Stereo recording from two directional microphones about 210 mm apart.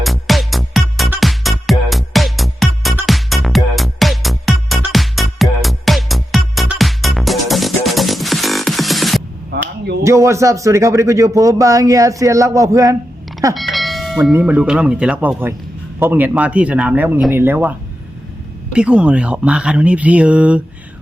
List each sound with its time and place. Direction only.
0.0 s music: centre (ahead or behind)
9.5 s a sound: 50° right (ahead or behind)
10.0 s speech: 15° right (ahead or behind)
13.5 s speech: centre (ahead or behind)